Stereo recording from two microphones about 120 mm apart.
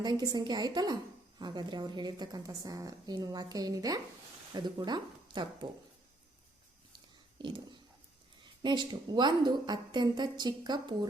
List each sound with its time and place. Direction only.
0.0 s a woman's voice: 35° right (ahead or behind)
7.3 s a woman's voice: 40° right (ahead or behind)